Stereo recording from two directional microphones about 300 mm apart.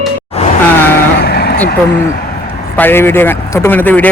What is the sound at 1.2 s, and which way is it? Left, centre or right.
Vehicle, left.